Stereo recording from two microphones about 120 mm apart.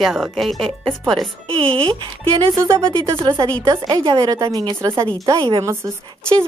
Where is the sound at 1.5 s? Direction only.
50° right (ahead or behind); by 4.6 s 30° right (ahead or behind).